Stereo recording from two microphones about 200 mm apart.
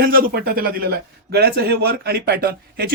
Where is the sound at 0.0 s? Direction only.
45° right (ahead or behind).